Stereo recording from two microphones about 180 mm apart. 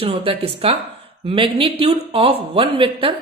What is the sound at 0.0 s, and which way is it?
Speech, 30° right (ahead or behind).